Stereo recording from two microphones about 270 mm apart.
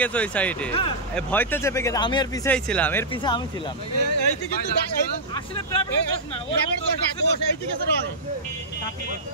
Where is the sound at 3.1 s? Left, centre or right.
Centre.